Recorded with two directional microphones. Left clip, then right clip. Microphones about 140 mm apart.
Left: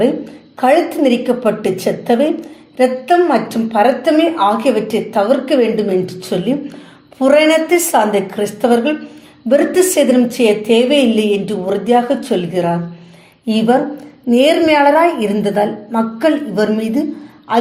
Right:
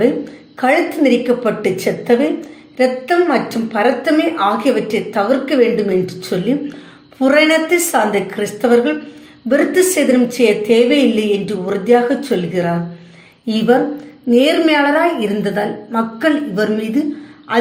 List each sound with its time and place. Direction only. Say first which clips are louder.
0.6 s a woman's voice: left 2 dB; 15° left (ahead or behind)